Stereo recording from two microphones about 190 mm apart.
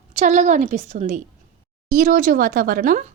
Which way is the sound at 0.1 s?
40° right (ahead or behind).